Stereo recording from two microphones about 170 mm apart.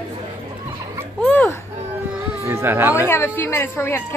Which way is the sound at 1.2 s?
10° left (ahead or behind).